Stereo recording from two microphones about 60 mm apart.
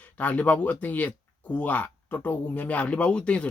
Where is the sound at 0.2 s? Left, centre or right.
Left.